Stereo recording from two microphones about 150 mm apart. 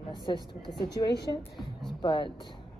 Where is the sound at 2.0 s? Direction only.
30° left (ahead or behind).